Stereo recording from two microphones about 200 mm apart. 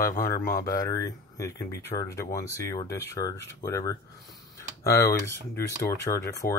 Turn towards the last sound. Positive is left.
turn(degrees=15)  # may be behind; listen again after turning